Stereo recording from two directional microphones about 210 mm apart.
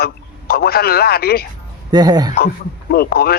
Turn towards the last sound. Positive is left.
turn(degrees=45)  # may be behind; listen again after turning